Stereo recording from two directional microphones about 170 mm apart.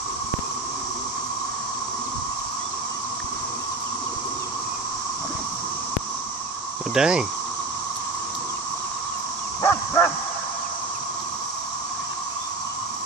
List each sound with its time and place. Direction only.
6.9 s speech: 5° right (ahead or behind)
9.6 s dog: 20° left (ahead or behind)